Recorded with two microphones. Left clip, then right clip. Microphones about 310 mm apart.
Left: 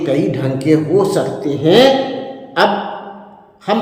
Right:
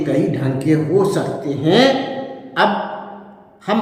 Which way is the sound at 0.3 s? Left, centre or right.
Centre.